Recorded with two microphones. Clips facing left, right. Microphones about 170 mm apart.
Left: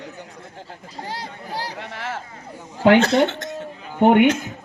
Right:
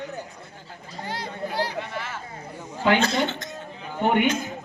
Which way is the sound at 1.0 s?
40° left (ahead or behind).